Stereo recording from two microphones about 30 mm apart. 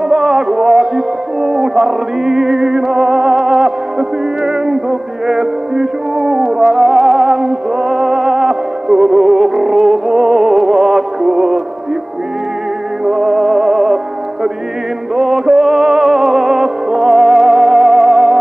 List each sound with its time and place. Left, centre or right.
0.1 s music: centre
13.0 s music: centre
15.1 s music: centre